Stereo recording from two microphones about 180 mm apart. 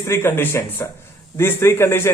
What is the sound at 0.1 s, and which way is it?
Speech, 15° left (ahead or behind).